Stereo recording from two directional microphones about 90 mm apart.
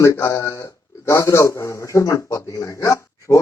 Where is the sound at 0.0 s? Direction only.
30° left (ahead or behind).